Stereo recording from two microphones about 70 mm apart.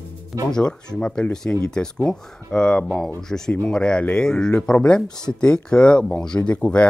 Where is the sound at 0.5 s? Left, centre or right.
Centre.